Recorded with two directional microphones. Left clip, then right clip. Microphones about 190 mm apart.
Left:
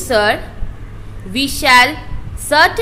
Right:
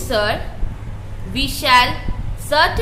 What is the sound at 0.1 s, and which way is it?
A woman's voice, 25° left (ahead or behind).